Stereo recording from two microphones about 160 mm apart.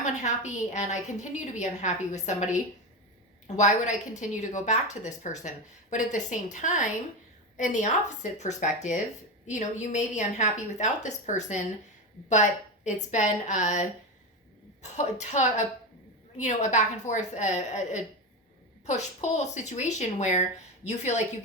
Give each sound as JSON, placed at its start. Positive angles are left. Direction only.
{"t": 0.0, "sound": "a woman's voice", "side_deg": 50}